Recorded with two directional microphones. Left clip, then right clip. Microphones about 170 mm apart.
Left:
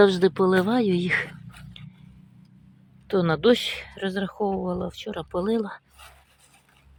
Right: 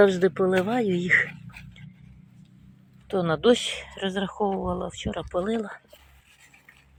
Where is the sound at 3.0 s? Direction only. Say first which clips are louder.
Left 1 dB; 45° left (ahead or behind).